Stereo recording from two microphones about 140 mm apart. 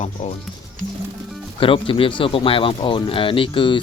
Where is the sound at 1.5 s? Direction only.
40° left (ahead or behind).